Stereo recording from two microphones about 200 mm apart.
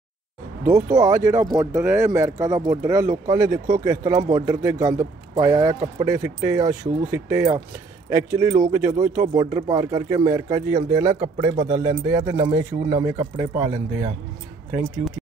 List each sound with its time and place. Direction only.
0.7 s speech: 15° right (ahead or behind)